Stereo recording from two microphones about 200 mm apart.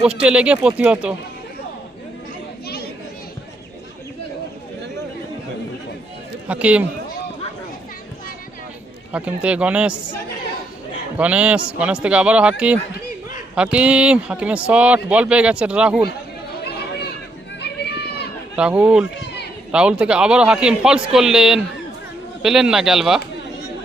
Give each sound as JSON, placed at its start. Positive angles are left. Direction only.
{"t": 0.0, "sound": "speech", "side_deg": -5}
{"t": 2.6, "sound": "children playing", "side_deg": 50}
{"t": 6.5, "sound": "speech", "side_deg": -5}
{"t": 9.1, "sound": "speech", "side_deg": -5}
{"t": 11.2, "sound": "speech", "side_deg": -5}
{"t": 16.6, "sound": "chatter", "side_deg": 55}
{"t": 17.6, "sound": "run", "side_deg": 55}
{"t": 18.5, "sound": "speech", "side_deg": -5}